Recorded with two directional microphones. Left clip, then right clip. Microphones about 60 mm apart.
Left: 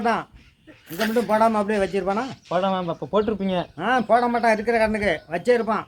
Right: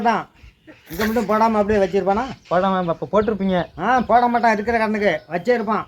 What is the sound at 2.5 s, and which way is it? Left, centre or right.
Speech, left.